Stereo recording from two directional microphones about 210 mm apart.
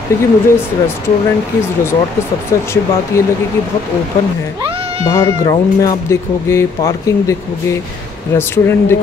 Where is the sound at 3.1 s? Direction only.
15° left (ahead or behind).